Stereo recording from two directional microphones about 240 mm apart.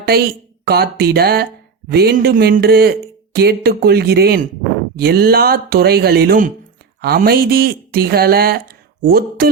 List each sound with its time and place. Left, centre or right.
0.1 s speech: right